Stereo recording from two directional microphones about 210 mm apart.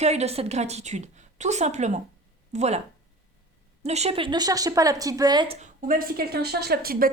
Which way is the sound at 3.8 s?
30° right (ahead or behind).